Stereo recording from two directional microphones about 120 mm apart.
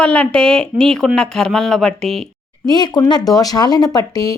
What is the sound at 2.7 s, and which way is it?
Speech, 35° left (ahead or behind).